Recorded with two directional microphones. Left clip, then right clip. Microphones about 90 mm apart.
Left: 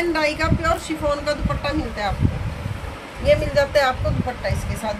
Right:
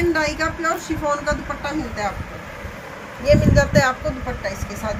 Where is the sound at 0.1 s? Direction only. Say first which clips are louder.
Even; 40° left (ahead or behind).